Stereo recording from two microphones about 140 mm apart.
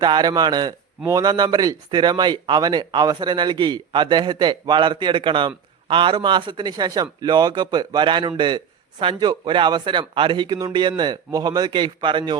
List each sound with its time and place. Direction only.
0.0 s a man's voice: 30° right (ahead or behind)